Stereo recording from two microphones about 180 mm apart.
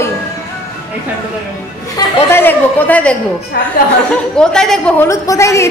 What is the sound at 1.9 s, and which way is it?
Speech, 10° left (ahead or behind).